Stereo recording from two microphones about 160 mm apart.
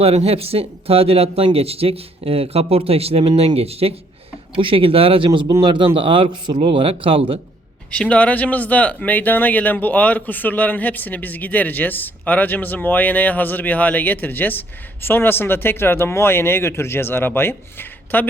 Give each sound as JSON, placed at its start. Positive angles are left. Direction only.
{"t": 0.0, "sound": "speech", "side_deg": -40}
{"t": 7.9, "sound": "speech", "side_deg": 5}